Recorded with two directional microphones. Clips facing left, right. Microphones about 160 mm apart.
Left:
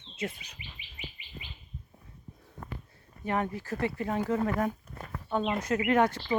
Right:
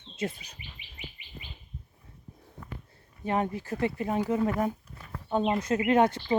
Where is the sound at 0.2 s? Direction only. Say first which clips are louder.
Right 3 dB; 35° right (ahead or behind).